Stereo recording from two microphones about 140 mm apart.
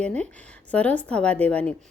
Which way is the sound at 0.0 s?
10° left (ahead or behind).